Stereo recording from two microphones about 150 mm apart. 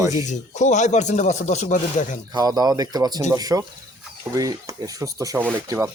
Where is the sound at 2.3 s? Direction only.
25° right (ahead or behind).